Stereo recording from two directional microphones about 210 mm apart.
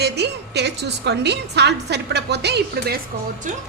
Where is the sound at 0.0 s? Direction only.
50° right (ahead or behind).